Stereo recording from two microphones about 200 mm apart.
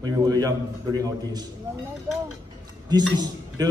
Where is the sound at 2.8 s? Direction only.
20° right (ahead or behind).